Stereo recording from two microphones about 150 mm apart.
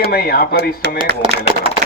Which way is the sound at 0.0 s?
90° left.